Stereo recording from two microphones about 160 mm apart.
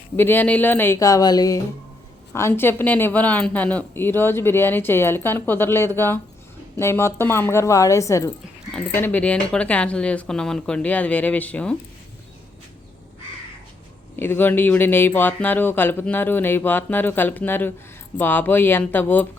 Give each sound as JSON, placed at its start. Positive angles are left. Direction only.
{"t": 0.2, "sound": "a woman's voice", "side_deg": 15}
{"t": 14.2, "sound": "a woman's voice", "side_deg": 15}